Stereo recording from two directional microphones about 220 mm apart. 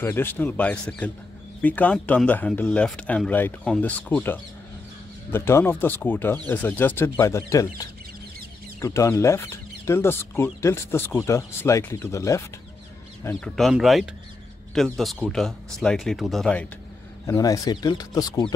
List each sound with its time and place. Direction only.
0.0 s speech: 10° left (ahead or behind)
8.8 s speech: 15° left (ahead or behind)
17.3 s speech: 15° left (ahead or behind)